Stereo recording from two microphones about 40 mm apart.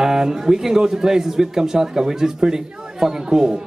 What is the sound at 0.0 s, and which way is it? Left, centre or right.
A man's voice, centre.